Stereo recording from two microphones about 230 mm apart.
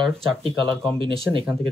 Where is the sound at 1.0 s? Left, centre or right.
Right.